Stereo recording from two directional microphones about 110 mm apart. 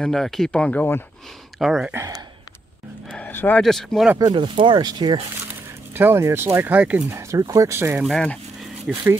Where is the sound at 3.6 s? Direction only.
5° left (ahead or behind).